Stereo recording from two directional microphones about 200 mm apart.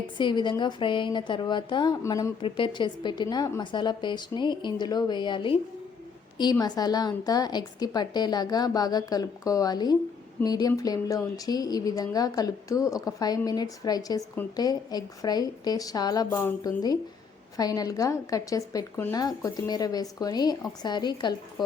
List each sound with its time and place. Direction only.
0.2 s a woman's voice: 25° left (ahead or behind)